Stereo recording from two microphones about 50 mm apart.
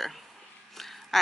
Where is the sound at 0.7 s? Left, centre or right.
Centre.